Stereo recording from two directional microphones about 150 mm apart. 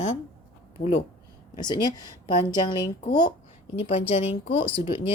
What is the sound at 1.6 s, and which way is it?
Speech, 30° left (ahead or behind).